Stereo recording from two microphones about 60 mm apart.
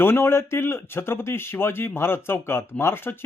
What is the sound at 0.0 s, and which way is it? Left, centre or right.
Speech, left.